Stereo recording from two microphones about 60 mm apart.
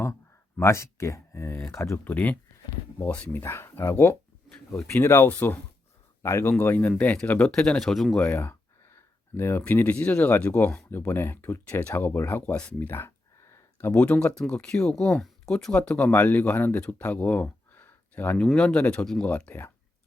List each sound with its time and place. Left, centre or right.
0.6 s speech: left
2.0 s speech: left
3.4 s speech: left
4.5 s a sound: centre
4.9 s speech: left
6.9 s speech: centre
8.4 s speech: left
10.9 s speech: left
11.7 s speech: left
11.9 s speech: left
12.5 s speech: left
15.7 s speech: centre; by 18.3 s left
18.5 s speech: centre